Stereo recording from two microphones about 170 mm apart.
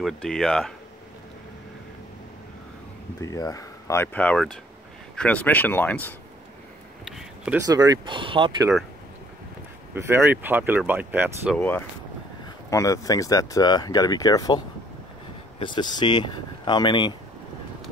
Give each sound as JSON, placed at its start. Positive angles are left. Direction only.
{"t": 0.0, "sound": "speech", "side_deg": 0}
{"t": 3.2, "sound": "speech", "side_deg": 20}
{"t": 7.1, "sound": "a sound", "side_deg": 0}
{"t": 7.6, "sound": "speech", "side_deg": -20}
{"t": 9.9, "sound": "speech", "side_deg": -15}
{"t": 11.5, "sound": "speech", "side_deg": 10}
{"t": 15.6, "sound": "speech", "side_deg": 25}